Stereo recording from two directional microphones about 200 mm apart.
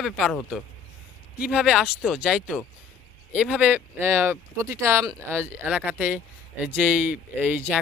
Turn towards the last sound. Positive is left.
turn(degrees=-10)  # may be behind; listen again after turning